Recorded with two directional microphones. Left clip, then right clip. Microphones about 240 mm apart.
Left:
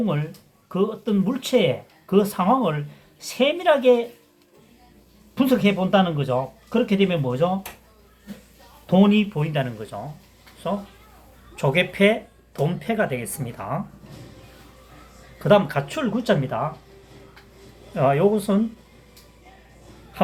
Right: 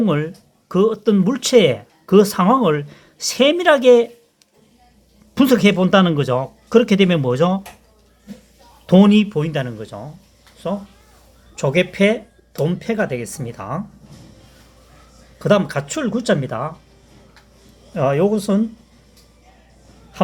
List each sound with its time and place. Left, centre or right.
0.0 s speech: right
5.3 s speech: right
8.9 s speech: right
15.4 s speech: right
17.9 s speech: right